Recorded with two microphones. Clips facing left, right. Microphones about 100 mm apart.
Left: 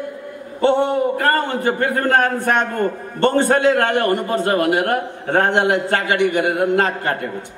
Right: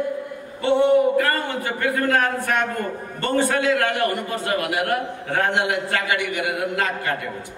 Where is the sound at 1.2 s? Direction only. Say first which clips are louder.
Left 3 dB; 40° left (ahead or behind).